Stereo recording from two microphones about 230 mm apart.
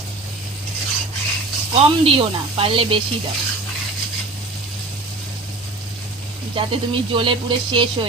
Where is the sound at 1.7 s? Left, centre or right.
Right.